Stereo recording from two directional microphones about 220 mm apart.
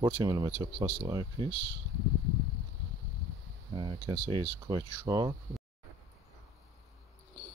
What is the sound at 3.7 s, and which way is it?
Speech, 20° right (ahead or behind).